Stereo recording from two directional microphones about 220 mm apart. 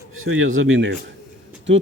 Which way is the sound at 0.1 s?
65° right (ahead or behind).